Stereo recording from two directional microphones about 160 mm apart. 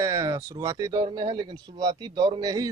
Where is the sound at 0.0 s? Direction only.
20° right (ahead or behind).